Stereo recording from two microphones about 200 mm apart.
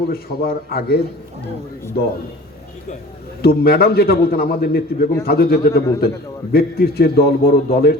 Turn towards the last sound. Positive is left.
turn(degrees=50)  # may be behind; listen again after turning